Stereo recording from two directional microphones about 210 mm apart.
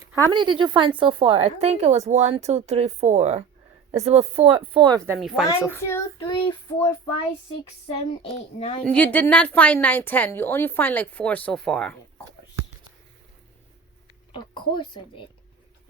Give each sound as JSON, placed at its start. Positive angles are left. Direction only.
{"t": 0.3, "sound": "a woman's voice", "side_deg": -20}
{"t": 5.2, "sound": "speech", "side_deg": 0}
{"t": 5.5, "sound": "a woman's voice", "side_deg": 15}
{"t": 6.1, "sound": "child singing", "side_deg": 25}
{"t": 7.6, "sound": "child singing", "side_deg": 25}
{"t": 8.8, "sound": "a woman's voice", "side_deg": 5}
{"t": 14.3, "sound": "speech", "side_deg": 20}